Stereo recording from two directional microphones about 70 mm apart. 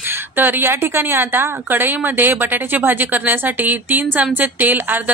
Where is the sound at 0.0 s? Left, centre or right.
Right.